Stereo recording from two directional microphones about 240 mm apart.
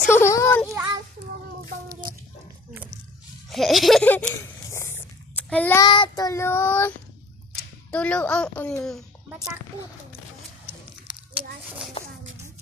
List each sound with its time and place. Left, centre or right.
0.0 s speech: centre
1.9 s chicken: centre
3.5 s a sound: centre
7.9 s a woman's voice: centre